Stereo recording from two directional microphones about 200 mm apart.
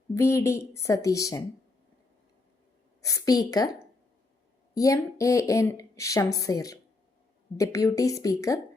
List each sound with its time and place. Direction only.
0.1 s a woman's voice: 15° left (ahead or behind)
3.0 s a woman's voice: 15° left (ahead or behind)